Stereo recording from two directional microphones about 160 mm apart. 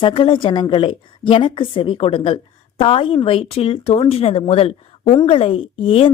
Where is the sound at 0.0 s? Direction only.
30° left (ahead or behind).